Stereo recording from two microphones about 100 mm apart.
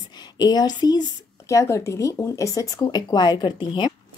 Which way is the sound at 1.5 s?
30° left (ahead or behind).